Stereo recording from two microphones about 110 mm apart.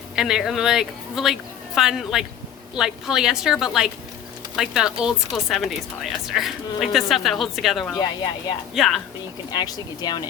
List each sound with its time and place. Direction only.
0.2 s speech: 5° right (ahead or behind)
9.5 s speech: 40° left (ahead or behind)